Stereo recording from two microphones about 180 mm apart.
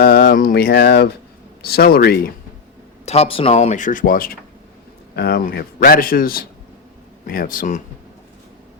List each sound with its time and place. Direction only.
0.0 s a man's voice: 55° left (ahead or behind)
3.1 s a man's voice: 35° left (ahead or behind); by 7.8 s 50° left (ahead or behind)